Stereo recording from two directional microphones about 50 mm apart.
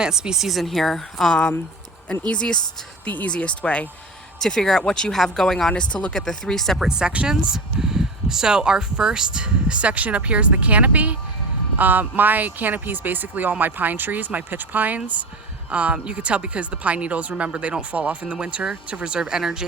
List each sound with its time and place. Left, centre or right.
0.0 s a woman's voice: centre; by 3.8 s left
4.4 s speech: centre
5.7 s speech: left
6.1 s speech: centre
6.7 s speech: centre